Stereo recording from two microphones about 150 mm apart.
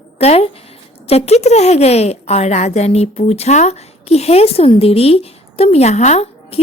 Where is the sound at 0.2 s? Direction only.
45° left (ahead or behind).